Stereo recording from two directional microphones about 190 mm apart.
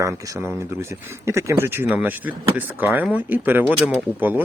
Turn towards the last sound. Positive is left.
turn(degrees=-10)  # may be behind; listen again after turning